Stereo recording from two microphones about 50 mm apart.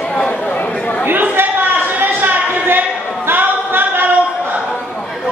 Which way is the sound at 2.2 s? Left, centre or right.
Right.